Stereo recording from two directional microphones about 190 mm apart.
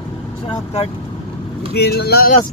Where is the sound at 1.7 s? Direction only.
55° left (ahead or behind).